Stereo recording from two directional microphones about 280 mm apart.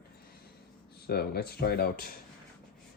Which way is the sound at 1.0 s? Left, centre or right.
Left.